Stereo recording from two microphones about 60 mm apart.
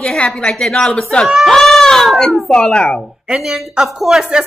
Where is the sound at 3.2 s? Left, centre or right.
Centre.